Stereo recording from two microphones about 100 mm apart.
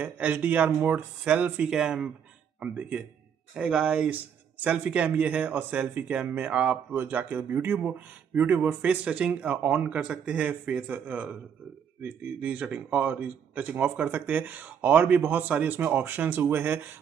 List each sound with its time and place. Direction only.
0.0 s speech: 15° right (ahead or behind)